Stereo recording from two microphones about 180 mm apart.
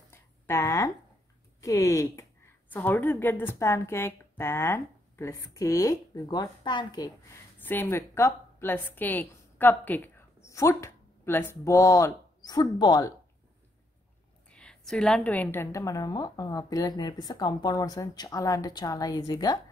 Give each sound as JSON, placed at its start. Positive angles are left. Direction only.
{"t": 0.1, "sound": "a sound", "side_deg": 15}
{"t": 1.6, "sound": "a woman's voice", "side_deg": 15}
{"t": 7.5, "sound": "a woman's voice", "side_deg": 10}
{"t": 14.5, "sound": "a woman's voice", "side_deg": 5}